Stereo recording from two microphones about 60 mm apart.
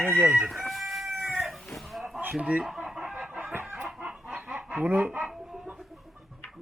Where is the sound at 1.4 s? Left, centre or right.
Centre.